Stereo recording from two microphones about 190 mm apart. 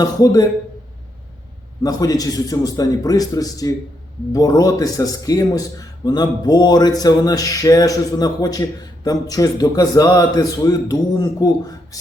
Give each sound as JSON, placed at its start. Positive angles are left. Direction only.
{"t": 0.0, "sound": "a man's voice", "side_deg": 20}
{"t": 1.8, "sound": "a man's voice", "side_deg": 20}